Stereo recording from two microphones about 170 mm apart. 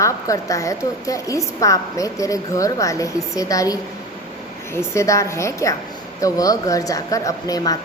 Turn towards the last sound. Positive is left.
turn(degrees=20)  # may be behind; listen again after turning